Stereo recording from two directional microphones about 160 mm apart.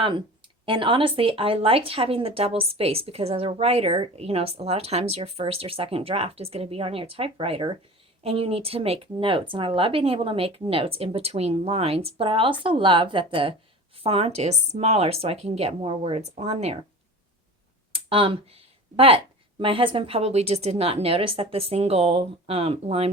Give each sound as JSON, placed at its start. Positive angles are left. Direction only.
{"t": 0.6, "sound": "speech", "side_deg": -30}
{"t": 17.9, "sound": "speech", "side_deg": -35}